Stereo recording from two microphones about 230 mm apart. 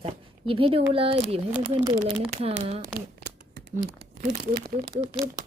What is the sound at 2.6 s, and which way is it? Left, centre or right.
Speech, right.